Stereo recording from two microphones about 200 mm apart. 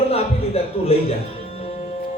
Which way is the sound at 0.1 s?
30° left (ahead or behind).